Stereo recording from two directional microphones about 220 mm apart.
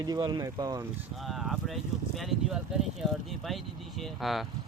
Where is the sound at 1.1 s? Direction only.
Centre (ahead or behind).